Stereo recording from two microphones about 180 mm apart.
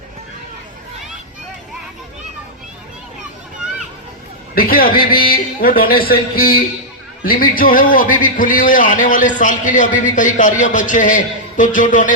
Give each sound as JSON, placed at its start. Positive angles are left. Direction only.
{"t": 4.5, "sound": "a man's voice", "side_deg": 55}